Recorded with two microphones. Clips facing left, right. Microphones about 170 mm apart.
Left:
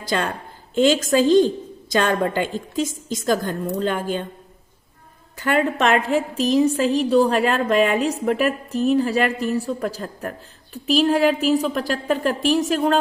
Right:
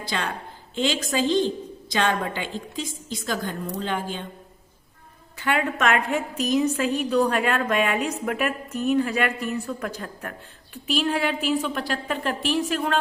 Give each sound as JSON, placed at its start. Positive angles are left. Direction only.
{"t": 0.0, "sound": "a woman's voice", "side_deg": 45}
{"t": 5.4, "sound": "a woman's voice", "side_deg": 45}